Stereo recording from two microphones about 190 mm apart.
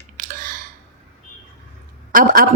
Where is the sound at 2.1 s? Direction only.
45° right (ahead or behind).